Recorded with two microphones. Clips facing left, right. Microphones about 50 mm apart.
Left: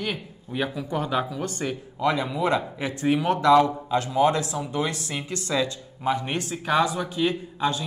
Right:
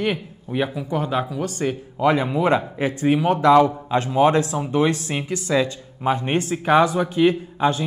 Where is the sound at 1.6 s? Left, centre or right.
Right.